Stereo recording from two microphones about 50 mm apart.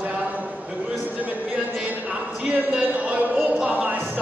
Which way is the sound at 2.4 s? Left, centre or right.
Right.